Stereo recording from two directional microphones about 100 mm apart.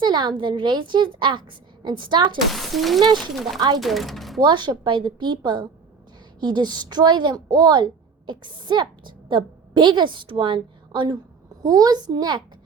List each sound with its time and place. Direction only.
0.0 s a woman's voice: 50° right (ahead or behind)
2.5 s speech: centre (ahead or behind)
4.4 s a woman's voice: 50° right (ahead or behind)